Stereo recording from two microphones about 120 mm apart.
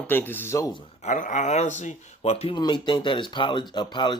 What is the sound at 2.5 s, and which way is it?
Speech, 40° left (ahead or behind).